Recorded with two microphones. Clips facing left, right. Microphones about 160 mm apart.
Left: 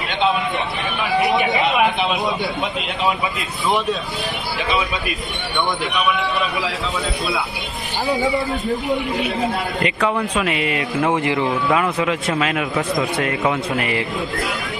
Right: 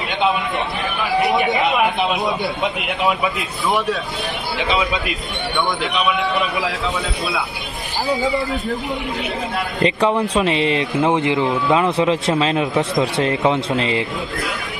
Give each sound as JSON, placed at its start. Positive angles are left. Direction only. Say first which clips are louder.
{"t": 1.2, "sound": "speech", "louder": "right 1 dB", "side_deg": 0}
{"t": 8.2, "sound": "speech", "louder": "even", "side_deg": 20}
{"t": 9.8, "sound": "a man's voice", "louder": "right 5 dB", "side_deg": -30}